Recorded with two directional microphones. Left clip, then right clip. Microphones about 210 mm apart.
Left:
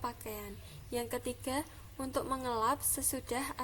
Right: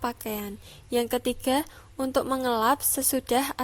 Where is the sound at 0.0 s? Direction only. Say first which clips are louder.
Right 9 dB; 40° right (ahead or behind).